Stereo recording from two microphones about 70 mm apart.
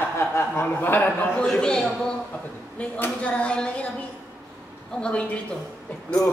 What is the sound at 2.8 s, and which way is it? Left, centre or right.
Speech, centre.